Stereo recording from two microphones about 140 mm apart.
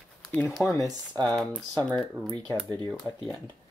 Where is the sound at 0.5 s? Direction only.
Centre (ahead or behind).